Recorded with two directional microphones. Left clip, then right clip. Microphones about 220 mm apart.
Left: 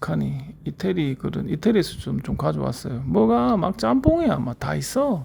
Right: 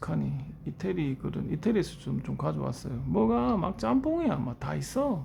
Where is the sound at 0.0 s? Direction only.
25° left (ahead or behind).